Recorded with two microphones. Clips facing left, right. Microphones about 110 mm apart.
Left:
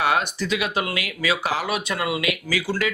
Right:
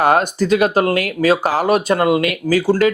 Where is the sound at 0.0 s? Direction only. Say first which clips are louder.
Right 8 dB; 45° right (ahead or behind).